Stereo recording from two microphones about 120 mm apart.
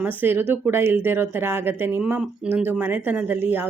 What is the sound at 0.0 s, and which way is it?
Speech, 15° right (ahead or behind).